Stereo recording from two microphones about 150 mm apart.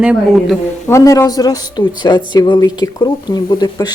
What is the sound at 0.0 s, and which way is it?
Speech, 5° right (ahead or behind).